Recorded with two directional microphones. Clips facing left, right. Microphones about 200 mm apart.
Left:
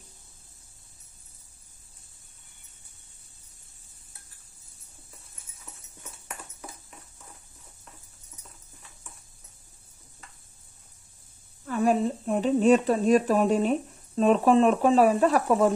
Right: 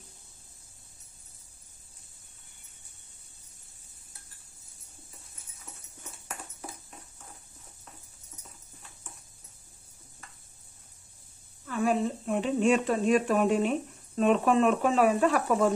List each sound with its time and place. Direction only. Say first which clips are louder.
11.6 s speech: left 3 dB; 40° left (ahead or behind)